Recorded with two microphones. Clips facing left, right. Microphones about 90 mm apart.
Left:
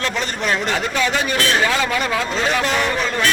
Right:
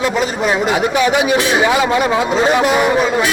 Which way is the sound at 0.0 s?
10° right (ahead or behind).